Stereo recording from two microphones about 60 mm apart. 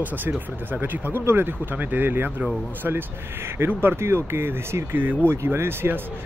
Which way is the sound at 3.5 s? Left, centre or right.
Right.